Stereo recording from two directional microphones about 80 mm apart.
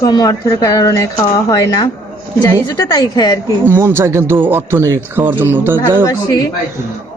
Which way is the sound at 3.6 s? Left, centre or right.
Right.